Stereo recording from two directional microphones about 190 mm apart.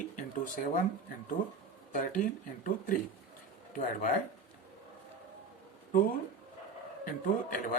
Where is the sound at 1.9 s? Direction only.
45° left (ahead or behind).